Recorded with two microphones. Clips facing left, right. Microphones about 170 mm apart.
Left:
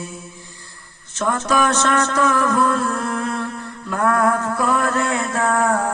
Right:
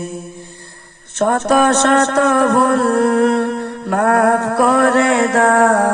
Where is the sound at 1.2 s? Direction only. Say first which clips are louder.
Right 6 dB; 60° right (ahead or behind).